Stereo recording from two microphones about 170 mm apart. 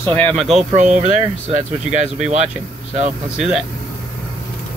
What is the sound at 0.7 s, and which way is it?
Speech, 45° right (ahead or behind).